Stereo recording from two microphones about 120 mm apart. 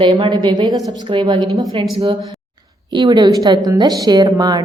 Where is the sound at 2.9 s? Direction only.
40° right (ahead or behind).